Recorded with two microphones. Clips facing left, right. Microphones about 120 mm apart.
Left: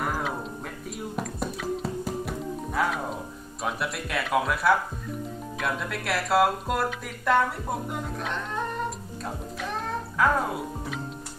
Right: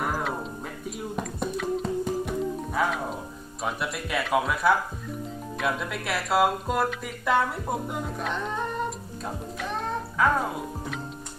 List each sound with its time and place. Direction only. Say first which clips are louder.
0.0 s music: right 1 dB; centre (ahead or behind)
3.6 s speech: even; centre (ahead or behind)
9.2 s music: right 1 dB; centre (ahead or behind)